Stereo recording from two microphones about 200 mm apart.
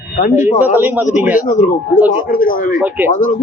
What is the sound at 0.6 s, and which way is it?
Speech, 10° right (ahead or behind).